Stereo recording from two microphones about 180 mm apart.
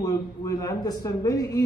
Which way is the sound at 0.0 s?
20° left (ahead or behind).